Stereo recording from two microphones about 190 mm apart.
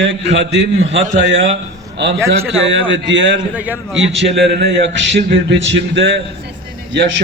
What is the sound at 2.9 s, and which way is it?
Speech, 75° right (ahead or behind).